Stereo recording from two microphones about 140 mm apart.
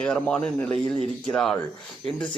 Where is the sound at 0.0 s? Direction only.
5° left (ahead or behind).